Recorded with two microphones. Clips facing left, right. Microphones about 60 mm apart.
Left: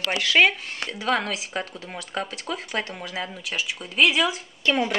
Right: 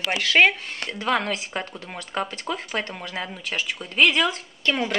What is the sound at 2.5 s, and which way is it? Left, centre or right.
Speech, right.